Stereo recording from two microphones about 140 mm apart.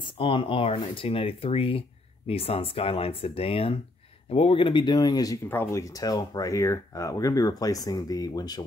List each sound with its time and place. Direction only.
0.0 s speech: 35° left (ahead or behind)